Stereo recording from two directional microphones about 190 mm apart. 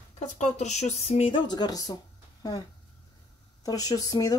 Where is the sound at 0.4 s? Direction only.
35° left (ahead or behind); by 2.0 s 20° left (ahead or behind).